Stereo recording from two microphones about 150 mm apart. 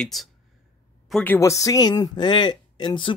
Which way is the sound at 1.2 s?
15° left (ahead or behind).